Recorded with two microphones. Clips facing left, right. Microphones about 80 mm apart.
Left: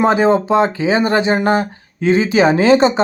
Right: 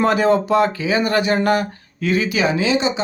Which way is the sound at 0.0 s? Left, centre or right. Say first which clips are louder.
Left 3 dB; left.